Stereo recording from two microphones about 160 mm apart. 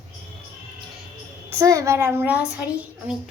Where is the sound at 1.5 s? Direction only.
20° right (ahead or behind).